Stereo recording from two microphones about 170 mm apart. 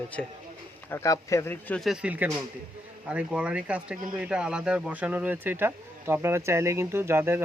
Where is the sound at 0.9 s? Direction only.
20° left (ahead or behind).